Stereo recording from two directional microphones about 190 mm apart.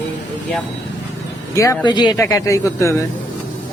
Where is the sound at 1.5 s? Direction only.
15° left (ahead or behind).